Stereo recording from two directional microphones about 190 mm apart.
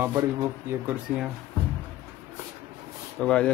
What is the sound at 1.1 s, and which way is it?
Speech, 5° right (ahead or behind).